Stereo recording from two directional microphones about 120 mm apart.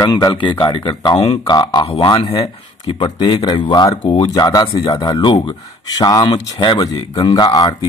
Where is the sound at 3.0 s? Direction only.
40° left (ahead or behind).